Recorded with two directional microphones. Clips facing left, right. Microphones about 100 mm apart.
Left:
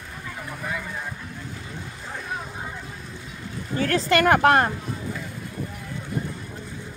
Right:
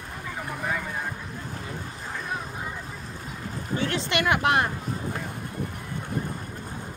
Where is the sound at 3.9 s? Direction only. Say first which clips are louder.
Left 8 dB; 40° left (ahead or behind).